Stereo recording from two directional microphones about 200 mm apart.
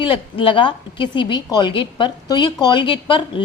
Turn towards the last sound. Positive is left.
turn(degrees=25)  # may be behind; listen again after turning